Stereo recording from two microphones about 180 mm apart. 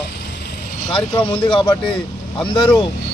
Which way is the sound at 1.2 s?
30° left (ahead or behind).